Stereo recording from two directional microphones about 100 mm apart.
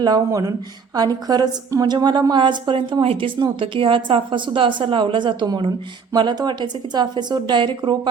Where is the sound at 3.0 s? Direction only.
70° right (ahead or behind).